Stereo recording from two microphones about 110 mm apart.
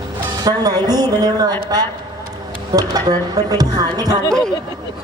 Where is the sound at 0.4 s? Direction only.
35° right (ahead or behind).